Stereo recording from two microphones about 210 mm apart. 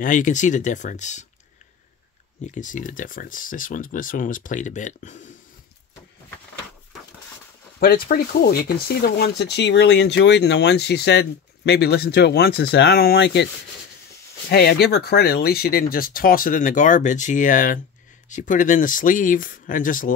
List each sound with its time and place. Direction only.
0.0 s speech: 40° left (ahead or behind)
2.4 s speech: 35° left (ahead or behind)
7.8 s speech: 45° left (ahead or behind)
14.5 s speech: 50° left (ahead or behind)